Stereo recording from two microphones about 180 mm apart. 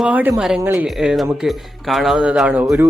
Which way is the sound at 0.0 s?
10° right (ahead or behind).